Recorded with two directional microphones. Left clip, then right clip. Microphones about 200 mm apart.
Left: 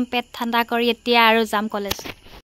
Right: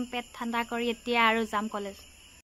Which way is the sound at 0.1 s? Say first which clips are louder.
Left 11 dB; 55° left (ahead or behind).